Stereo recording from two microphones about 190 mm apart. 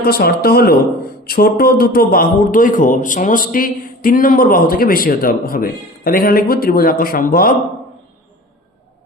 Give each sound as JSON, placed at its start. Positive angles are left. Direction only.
{"t": 0.0, "sound": "a man's voice", "side_deg": 55}